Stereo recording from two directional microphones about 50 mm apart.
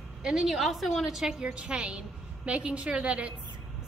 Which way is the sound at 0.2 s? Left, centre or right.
Centre.